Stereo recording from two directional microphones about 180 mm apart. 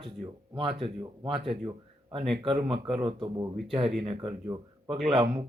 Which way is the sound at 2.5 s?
30° right (ahead or behind).